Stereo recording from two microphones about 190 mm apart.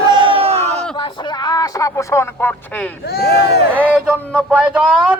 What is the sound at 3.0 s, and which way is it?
Speech, 55° left (ahead or behind).